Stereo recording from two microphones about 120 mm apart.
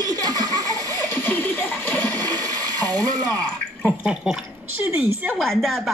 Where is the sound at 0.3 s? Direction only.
30° left (ahead or behind).